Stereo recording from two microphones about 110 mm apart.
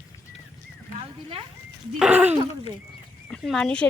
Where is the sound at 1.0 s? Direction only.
55° right (ahead or behind).